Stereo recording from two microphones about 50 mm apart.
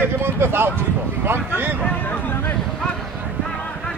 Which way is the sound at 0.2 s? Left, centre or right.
Right.